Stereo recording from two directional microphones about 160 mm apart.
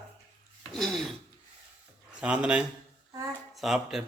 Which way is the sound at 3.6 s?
Centre (ahead or behind).